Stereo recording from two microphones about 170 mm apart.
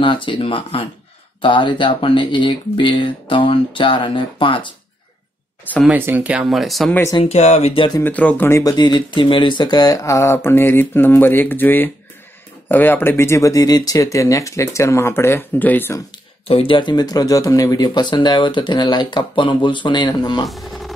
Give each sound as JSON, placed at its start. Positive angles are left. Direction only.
{"t": 0.0, "sound": "speech", "side_deg": 30}
{"t": 5.9, "sound": "speech", "side_deg": -10}
{"t": 7.2, "sound": "speech", "side_deg": 40}
{"t": 8.0, "sound": "speech", "side_deg": 10}
{"t": 16.4, "sound": "speech", "side_deg": 30}
{"t": 20.4, "sound": "speech", "side_deg": 0}